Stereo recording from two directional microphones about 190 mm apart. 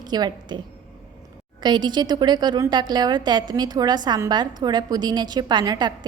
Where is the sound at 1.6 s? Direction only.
25° right (ahead or behind).